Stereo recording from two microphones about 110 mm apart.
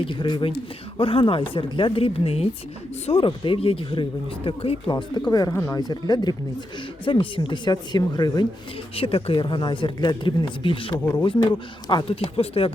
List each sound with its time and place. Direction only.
0.0 s a woman's voice: 50° left (ahead or behind); by 4.8 s 65° left (ahead or behind)
4.9 s speech: 40° left (ahead or behind)
7.0 s speech: 50° left (ahead or behind)
9.0 s a woman's voice: 60° left (ahead or behind)